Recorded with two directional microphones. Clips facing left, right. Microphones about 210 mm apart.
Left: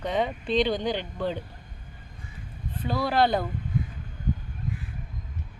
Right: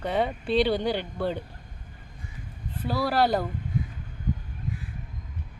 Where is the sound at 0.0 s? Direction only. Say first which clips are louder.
Right 1 dB; 10° right (ahead or behind).